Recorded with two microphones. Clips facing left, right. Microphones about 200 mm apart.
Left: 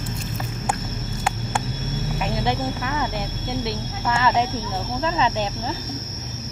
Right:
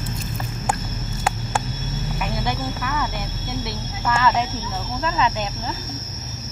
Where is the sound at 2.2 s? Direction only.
25° left (ahead or behind).